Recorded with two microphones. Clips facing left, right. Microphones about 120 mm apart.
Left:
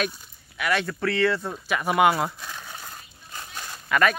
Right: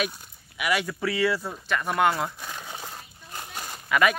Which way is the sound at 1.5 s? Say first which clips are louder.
Left 2 dB; 5° left (ahead or behind).